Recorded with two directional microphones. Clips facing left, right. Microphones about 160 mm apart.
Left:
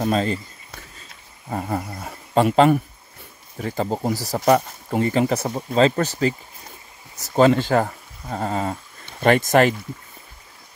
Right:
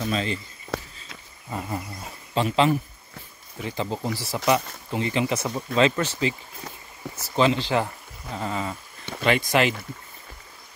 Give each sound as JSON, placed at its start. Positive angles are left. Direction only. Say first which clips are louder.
{"t": 0.0, "sound": "speech", "louder": "left 6 dB", "side_deg": 45}
{"t": 0.7, "sound": "a sound", "louder": "right 12 dB", "side_deg": -90}
{"t": 1.5, "sound": "speech", "louder": "left 5 dB", "side_deg": 50}
{"t": 7.3, "sound": "speech", "louder": "left 5 dB", "side_deg": 50}